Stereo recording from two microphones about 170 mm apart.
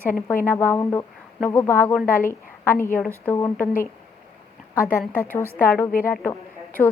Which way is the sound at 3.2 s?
15° left (ahead or behind).